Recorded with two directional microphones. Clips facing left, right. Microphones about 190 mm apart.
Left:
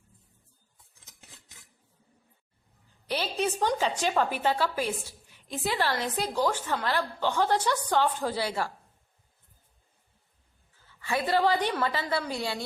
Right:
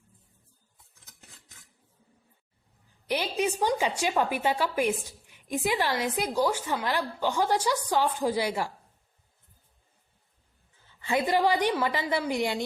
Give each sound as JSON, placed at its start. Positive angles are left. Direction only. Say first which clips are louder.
{"t": 3.1, "sound": "a woman's voice", "louder": "right 1 dB", "side_deg": -15}
{"t": 10.8, "sound": "a woman's voice", "louder": "right 2 dB", "side_deg": -20}